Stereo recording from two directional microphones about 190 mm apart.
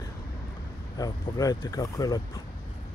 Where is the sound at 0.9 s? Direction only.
20° left (ahead or behind).